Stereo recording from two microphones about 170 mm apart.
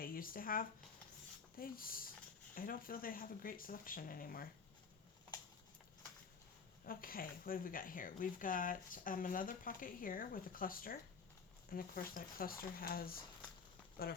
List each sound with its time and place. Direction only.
0.0 s speech: 55° left (ahead or behind)
6.8 s speech: 60° left (ahead or behind)